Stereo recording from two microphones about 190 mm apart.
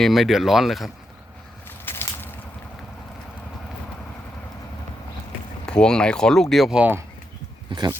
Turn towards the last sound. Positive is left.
turn(degrees=-25)  # may be behind; listen again after turning